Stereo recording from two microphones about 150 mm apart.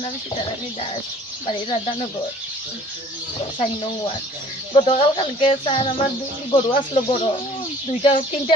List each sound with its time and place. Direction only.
4.7 s speech: 35° left (ahead or behind)